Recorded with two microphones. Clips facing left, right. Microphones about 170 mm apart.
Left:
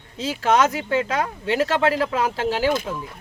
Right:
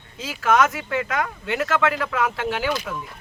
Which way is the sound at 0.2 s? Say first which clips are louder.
Left 1 dB; 30° left (ahead or behind).